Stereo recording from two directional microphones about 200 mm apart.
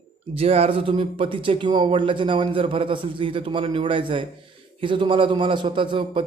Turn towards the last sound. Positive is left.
turn(degrees=-25)  # may be behind; listen again after turning